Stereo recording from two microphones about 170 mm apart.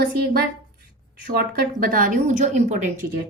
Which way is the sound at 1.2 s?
60° right (ahead or behind).